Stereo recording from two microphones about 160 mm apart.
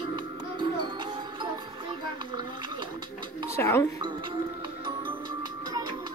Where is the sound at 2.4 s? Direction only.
30° right (ahead or behind).